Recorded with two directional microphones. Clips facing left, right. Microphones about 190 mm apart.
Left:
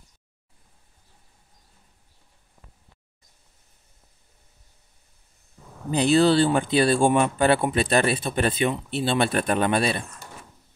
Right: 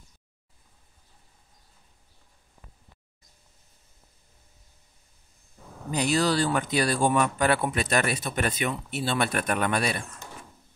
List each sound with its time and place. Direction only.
5.9 s speech: 30° left (ahead or behind)